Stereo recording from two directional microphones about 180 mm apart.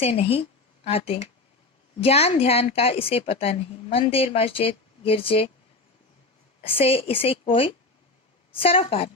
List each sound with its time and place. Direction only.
0.0 s a woman's voice: 35° left (ahead or behind)
6.6 s a woman's voice: 30° left (ahead or behind)